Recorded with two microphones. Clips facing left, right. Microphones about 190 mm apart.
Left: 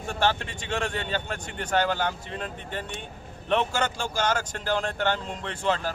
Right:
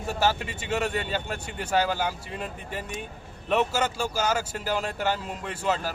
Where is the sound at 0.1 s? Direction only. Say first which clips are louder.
Even; 5° right (ahead or behind).